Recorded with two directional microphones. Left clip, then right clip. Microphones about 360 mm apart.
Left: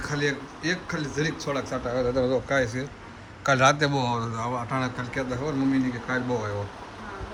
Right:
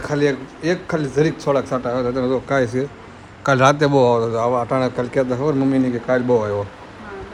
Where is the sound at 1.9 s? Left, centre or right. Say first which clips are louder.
Right 2 dB; right.